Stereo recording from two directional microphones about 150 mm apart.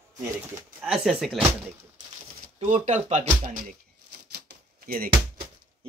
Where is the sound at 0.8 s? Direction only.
5° right (ahead or behind).